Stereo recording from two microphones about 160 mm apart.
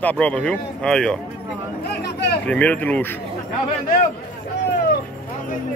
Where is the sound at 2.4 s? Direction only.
10° left (ahead or behind).